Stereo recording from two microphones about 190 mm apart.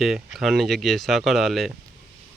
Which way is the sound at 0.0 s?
Centre (ahead or behind).